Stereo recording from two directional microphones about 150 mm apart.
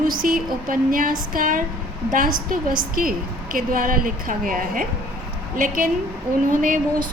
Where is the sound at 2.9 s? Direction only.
70° right (ahead or behind).